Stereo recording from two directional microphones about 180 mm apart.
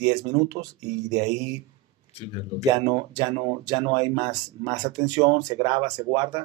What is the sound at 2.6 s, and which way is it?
Speech, 20° right (ahead or behind).